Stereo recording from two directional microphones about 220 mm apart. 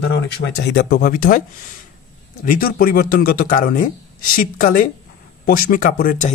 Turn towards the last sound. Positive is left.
turn(degrees=40)  # may be behind; listen again after turning